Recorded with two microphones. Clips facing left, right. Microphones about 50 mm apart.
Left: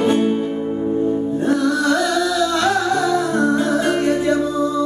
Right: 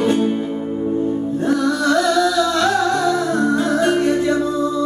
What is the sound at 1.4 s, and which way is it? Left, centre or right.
Music, centre.